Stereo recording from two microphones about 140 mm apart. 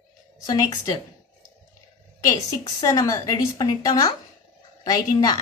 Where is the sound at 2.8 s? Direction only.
25° left (ahead or behind).